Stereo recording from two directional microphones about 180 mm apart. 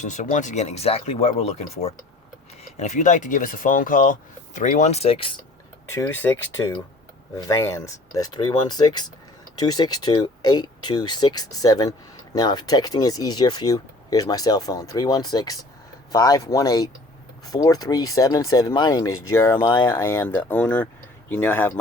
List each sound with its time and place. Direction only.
0.0 s speech: 40° left (ahead or behind)
5.9 s speech: 15° left (ahead or behind)